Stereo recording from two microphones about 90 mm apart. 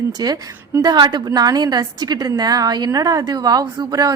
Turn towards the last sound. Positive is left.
turn(degrees=-45)  # may be behind; listen again after turning